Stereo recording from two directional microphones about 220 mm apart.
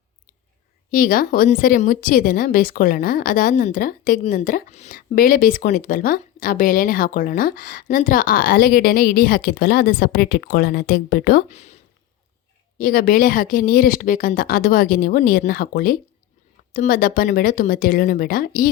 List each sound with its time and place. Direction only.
0.9 s a woman's voice: 40° left (ahead or behind)
11.5 s speech: 30° left (ahead or behind)
12.8 s a woman's voice: 40° left (ahead or behind)